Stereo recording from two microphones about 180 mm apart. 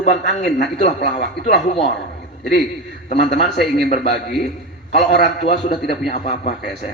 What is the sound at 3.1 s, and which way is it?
A man's voice, 70° left (ahead or behind).